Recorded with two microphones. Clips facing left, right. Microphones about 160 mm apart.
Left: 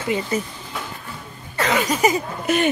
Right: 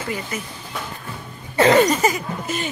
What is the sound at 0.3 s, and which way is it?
Speech, 35° left (ahead or behind).